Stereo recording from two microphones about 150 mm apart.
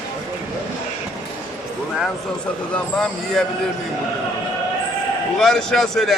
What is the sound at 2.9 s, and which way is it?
Speech, 5° left (ahead or behind).